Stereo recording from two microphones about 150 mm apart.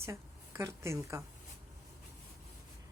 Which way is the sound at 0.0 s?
20° right (ahead or behind).